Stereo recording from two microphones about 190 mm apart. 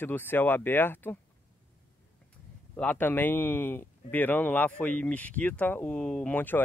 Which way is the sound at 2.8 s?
10° left (ahead or behind).